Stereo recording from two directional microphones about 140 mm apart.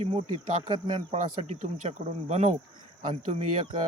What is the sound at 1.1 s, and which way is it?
Speech, 55° right (ahead or behind).